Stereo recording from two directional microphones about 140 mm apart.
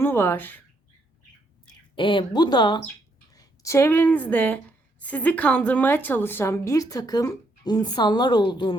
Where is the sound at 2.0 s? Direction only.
35° left (ahead or behind).